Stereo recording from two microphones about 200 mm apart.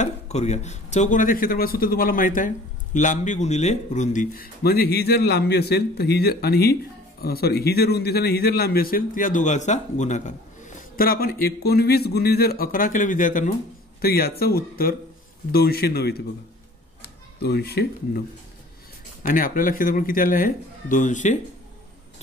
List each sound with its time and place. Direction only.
0.0 s speech: 35° left (ahead or behind); by 16.2 s 50° left (ahead or behind)
17.4 s speech: 55° left (ahead or behind)
19.2 s speech: 45° left (ahead or behind)